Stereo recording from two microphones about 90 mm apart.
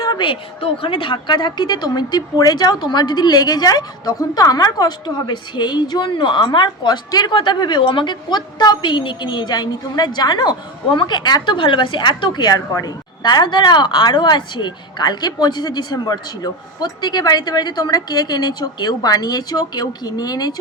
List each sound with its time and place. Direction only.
0.0 s a woman's voice: 55° left (ahead or behind)